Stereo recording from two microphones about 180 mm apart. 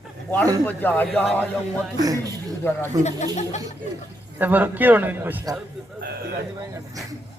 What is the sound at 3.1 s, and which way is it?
Speech, 40° left (ahead or behind).